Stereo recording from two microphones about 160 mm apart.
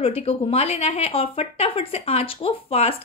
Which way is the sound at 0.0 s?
35° left (ahead or behind).